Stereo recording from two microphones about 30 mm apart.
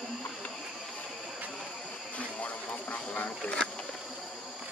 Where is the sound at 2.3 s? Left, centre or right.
Left.